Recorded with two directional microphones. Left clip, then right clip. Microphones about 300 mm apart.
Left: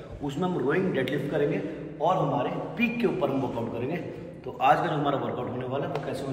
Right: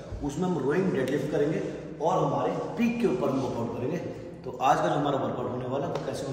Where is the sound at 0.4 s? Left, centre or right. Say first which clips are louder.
Left 1 dB; centre.